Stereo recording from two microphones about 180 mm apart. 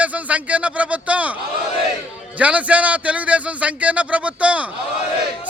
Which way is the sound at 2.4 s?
5° right (ahead or behind).